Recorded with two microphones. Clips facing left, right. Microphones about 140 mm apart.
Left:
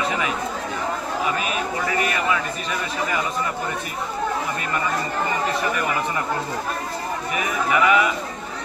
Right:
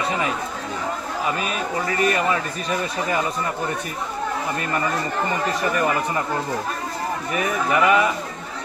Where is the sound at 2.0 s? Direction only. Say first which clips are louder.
Right 4 dB; 40° right (ahead or behind).